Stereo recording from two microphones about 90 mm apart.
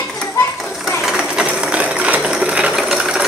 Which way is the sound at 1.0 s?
10° right (ahead or behind).